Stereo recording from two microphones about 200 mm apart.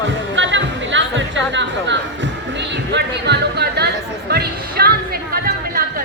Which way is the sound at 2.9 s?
55° right (ahead or behind).